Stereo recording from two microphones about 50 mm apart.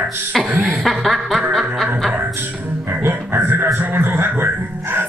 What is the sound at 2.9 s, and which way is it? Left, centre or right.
Speech, right.